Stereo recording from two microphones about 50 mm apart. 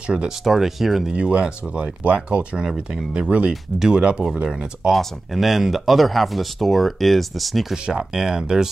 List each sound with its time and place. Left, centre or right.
0.0 s speech: centre
0.4 s speech: centre
1.1 s speech: right
2.6 s speech: centre
3.1 s speech: right
4.5 s speech: centre
7.7 s speech: centre